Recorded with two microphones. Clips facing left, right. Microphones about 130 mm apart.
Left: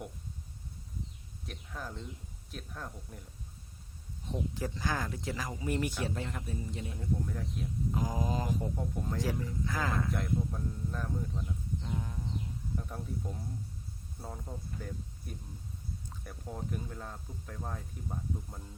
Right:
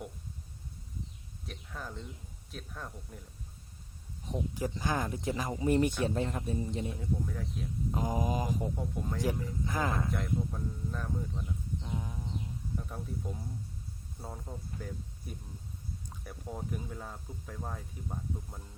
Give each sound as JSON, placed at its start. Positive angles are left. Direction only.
{"t": 1.5, "sound": "speech", "side_deg": 0}
{"t": 4.3, "sound": "speech", "side_deg": -15}
{"t": 7.0, "sound": "speech", "side_deg": 0}
{"t": 7.9, "sound": "speech", "side_deg": -20}
{"t": 10.1, "sound": "speech", "side_deg": 0}